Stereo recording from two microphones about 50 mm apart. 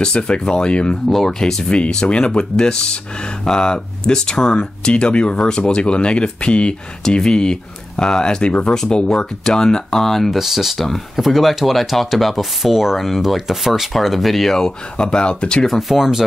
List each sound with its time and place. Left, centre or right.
0.0 s speech: centre
1.0 s speech: centre
10.3 s speech: centre
15.6 s speech: centre